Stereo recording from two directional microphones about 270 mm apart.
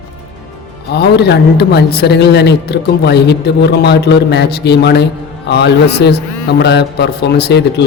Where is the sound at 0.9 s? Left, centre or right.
Left.